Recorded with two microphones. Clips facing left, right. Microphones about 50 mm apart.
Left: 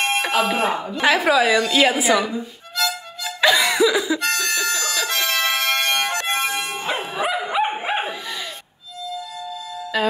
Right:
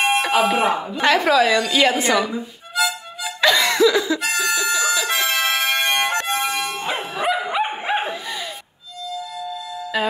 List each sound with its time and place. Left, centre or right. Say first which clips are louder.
0.0 s speech: right 2 dB; centre
1.0 s a woman's voice: right 1 dB; centre
2.3 s harmonica: right 3 dB; centre
3.3 s cough: even; centre
4.2 s music: right 1 dB; centre
5.9 s music: right 2 dB; right
6.2 s music: even; left
6.5 s dog: right 1 dB; centre
7.7 s dog: right 1 dB; centre
9.9 s speech: left 1 dB; centre